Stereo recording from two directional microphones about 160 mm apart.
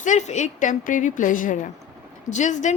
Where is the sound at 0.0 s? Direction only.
50° left (ahead or behind).